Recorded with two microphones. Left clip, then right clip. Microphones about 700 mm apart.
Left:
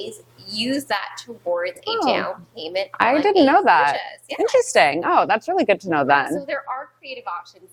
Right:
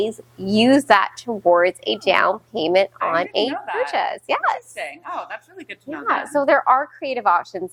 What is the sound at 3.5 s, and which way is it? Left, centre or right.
Speech, left.